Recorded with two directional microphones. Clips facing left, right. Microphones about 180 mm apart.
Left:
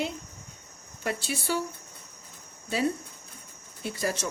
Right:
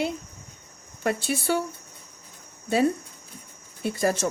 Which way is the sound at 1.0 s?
55° right (ahead or behind).